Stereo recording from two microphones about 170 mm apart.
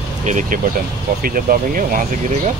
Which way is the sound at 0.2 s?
45° right (ahead or behind).